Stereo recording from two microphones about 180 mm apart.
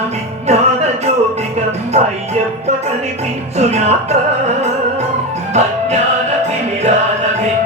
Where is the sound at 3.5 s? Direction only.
35° right (ahead or behind).